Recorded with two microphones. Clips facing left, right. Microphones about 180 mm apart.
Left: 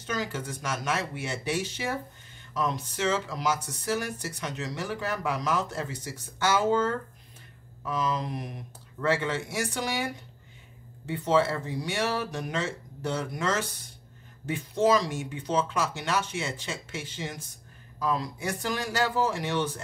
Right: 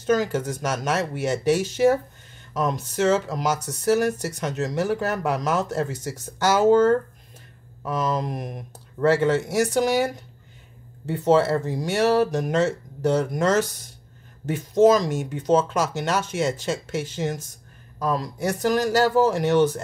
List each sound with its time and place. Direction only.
0.0 s speech: 45° right (ahead or behind)